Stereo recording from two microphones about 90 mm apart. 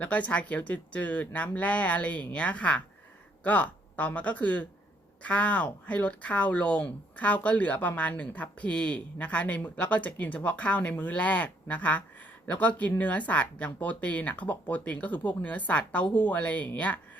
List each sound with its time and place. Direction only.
0.0 s speech: 15° left (ahead or behind)